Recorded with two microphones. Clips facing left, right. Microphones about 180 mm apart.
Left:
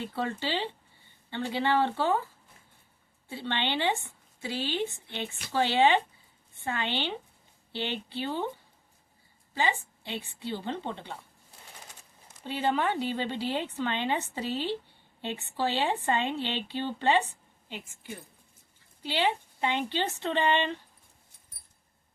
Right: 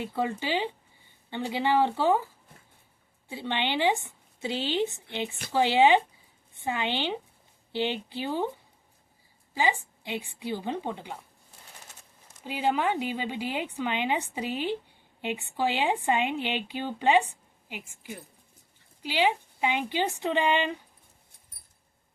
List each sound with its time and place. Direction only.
0.0 s speech: 15° right (ahead or behind)
3.2 s speech: 15° right (ahead or behind)
9.6 s speech: 15° right (ahead or behind)
12.4 s a woman's voice: 10° right (ahead or behind)